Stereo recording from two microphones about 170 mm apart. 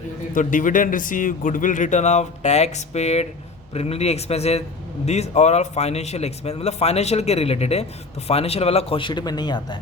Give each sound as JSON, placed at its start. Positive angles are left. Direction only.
{"t": 0.3, "sound": "a man's voice", "side_deg": 50}